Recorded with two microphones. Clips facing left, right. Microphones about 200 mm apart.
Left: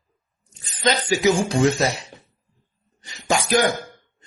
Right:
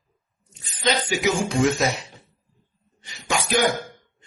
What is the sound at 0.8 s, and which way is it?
A man's voice, 40° left (ahead or behind).